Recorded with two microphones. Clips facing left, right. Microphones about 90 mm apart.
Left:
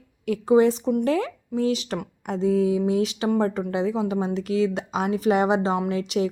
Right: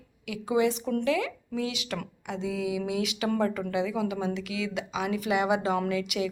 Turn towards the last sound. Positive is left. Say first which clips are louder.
# left 5 dB
turn(degrees=35)  # may be behind; listen again after turning